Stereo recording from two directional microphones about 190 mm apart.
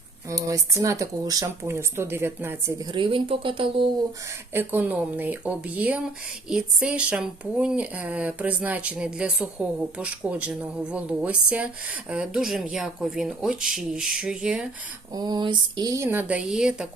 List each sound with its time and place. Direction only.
0.3 s speech: 15° right (ahead or behind)
4.5 s speech: 10° right (ahead or behind)
15.1 s speech: 20° right (ahead or behind); by 16.9 s 5° right (ahead or behind)